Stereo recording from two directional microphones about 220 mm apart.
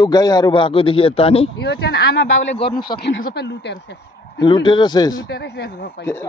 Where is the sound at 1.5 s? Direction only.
50° left (ahead or behind).